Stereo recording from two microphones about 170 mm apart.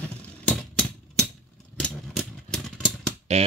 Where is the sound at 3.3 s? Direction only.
40° right (ahead or behind).